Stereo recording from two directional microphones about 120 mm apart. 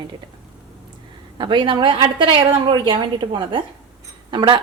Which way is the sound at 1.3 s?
40° right (ahead or behind).